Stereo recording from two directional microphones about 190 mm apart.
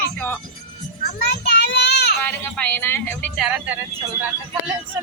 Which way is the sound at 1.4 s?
60° left (ahead or behind).